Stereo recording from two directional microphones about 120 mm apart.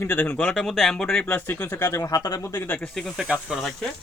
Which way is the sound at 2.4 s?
20° left (ahead or behind).